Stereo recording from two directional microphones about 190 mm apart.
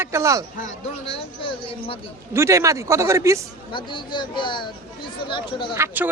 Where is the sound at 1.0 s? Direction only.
30° left (ahead or behind).